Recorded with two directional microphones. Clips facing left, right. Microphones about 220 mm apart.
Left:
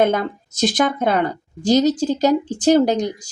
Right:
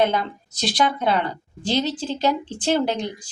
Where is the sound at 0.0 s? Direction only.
50° left (ahead or behind).